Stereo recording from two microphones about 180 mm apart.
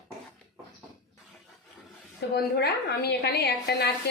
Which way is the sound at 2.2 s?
65° left (ahead or behind).